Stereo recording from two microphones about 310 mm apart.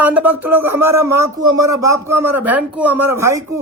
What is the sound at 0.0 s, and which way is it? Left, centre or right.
Speech, centre.